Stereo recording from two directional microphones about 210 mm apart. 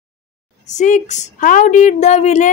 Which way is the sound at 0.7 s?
35° left (ahead or behind).